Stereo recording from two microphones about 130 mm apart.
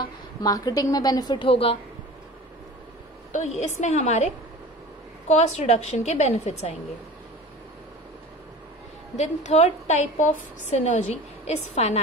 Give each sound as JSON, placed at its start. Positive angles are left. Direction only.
{"t": 0.0, "sound": "a woman's voice", "side_deg": 30}
{"t": 1.5, "sound": "a woman's voice", "side_deg": 45}
{"t": 3.3, "sound": "a woman's voice", "side_deg": 65}
{"t": 5.3, "sound": "a woman's voice", "side_deg": 60}
{"t": 9.1, "sound": "a woman's voice", "side_deg": 60}